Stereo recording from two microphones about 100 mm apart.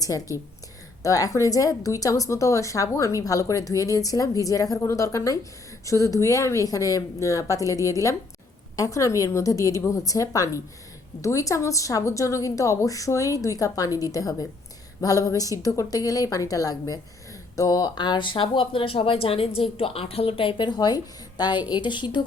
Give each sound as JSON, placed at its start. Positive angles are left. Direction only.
{"t": 0.0, "sound": "a woman's voice", "side_deg": 35}